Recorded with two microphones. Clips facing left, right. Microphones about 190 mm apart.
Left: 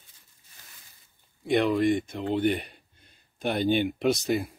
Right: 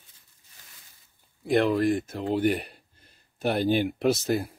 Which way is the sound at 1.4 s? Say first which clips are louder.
Even; centre (ahead or behind).